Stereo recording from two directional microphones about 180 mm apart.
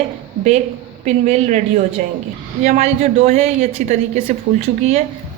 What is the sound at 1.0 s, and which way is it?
A woman's voice, 40° right (ahead or behind).